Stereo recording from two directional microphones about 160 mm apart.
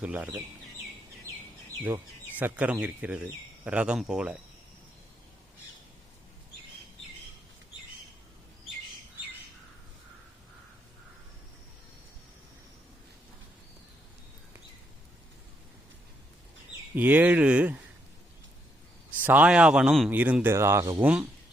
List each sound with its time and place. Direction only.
0.0 s speech: 10° right (ahead or behind)
1.3 s bird: 20° right (ahead or behind)
2.4 s speech: 10° right (ahead or behind)
16.9 s speech: 10° right (ahead or behind)
19.1 s speech: 10° right (ahead or behind)